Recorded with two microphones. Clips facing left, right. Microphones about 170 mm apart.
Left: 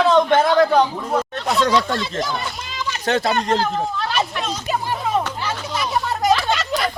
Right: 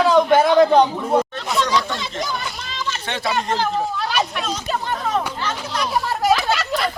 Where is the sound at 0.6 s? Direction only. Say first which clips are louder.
Right 2 dB; 20° right (ahead or behind).